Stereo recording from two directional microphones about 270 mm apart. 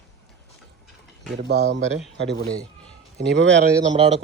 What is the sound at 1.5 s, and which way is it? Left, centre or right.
A man's voice, right.